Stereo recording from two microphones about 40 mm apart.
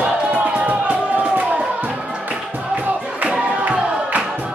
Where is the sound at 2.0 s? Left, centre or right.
Right.